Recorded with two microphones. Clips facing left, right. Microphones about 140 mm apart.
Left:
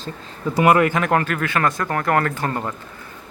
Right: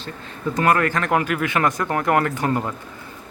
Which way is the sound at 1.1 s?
10° right (ahead or behind).